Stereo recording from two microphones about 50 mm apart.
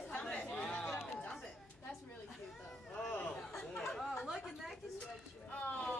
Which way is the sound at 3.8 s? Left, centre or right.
Centre.